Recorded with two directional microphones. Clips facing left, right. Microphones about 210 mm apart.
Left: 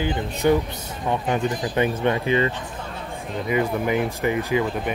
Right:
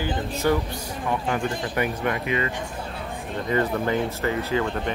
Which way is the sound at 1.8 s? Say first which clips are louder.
Left 5 dB; 25° left (ahead or behind).